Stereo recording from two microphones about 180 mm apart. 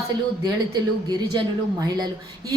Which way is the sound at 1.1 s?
25° right (ahead or behind).